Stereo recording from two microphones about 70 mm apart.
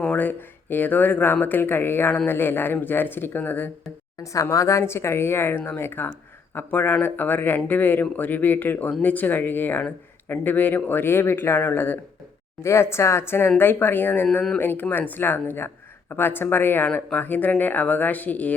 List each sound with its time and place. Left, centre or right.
0.0 s speech: left
4.2 s speech: left
12.6 s a woman's voice: left